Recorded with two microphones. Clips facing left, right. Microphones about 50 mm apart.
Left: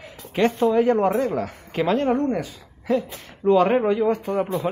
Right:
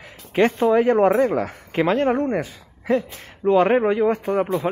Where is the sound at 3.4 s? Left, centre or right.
Right.